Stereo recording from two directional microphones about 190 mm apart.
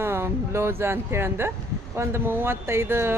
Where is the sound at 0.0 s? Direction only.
15° right (ahead or behind).